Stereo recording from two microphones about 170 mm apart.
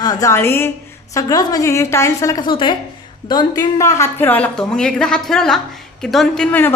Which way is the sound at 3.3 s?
25° left (ahead or behind).